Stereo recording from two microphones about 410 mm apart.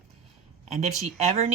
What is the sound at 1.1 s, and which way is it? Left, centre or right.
Speech, centre.